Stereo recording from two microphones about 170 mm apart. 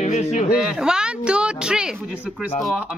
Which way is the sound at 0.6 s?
5° right (ahead or behind).